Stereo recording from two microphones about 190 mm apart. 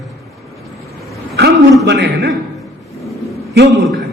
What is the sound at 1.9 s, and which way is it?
Speech, 65° right (ahead or behind).